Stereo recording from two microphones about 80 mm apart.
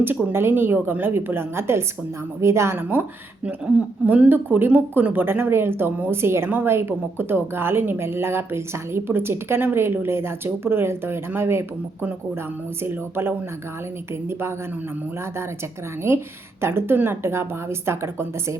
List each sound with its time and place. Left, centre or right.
0.3 s a woman's voice: right
2.9 s a woman's voice: centre
12.8 s a woman's voice: right
16.0 s a woman's voice: right